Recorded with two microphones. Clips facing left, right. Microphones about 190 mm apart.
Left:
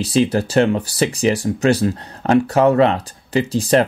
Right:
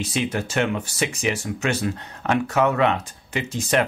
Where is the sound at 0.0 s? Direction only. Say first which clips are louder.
Left 8 dB; 35° left (ahead or behind).